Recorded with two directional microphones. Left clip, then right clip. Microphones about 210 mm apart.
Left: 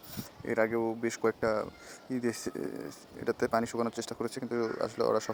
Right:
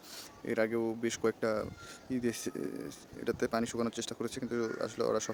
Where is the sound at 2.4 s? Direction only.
20° right (ahead or behind).